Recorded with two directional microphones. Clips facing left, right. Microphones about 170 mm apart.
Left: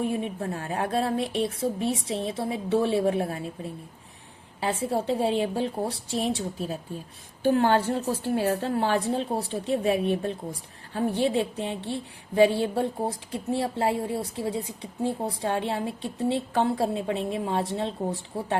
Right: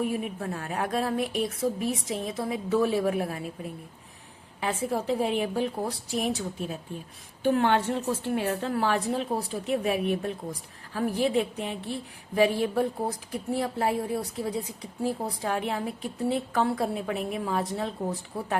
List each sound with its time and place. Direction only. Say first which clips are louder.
0.3 s speech: left 2 dB; 35° left (ahead or behind)
4.6 s a woman's voice: left 2 dB; 30° left (ahead or behind)